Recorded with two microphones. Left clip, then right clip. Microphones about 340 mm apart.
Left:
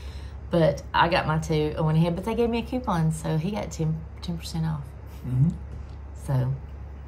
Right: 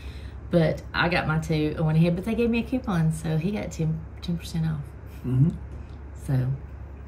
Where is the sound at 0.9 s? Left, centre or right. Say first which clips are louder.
Left 3 dB; left.